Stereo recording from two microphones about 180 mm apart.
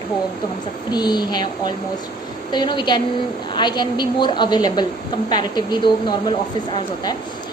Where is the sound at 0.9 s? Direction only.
25° left (ahead or behind).